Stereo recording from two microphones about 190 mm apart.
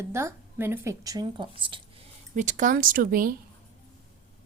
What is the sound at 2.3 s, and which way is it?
Speech, 40° right (ahead or behind).